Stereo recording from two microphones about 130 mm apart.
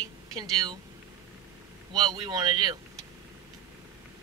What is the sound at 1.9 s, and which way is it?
Speech, 35° right (ahead or behind).